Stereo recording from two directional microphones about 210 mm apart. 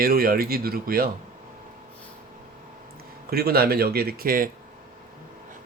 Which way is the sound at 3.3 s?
45° right (ahead or behind).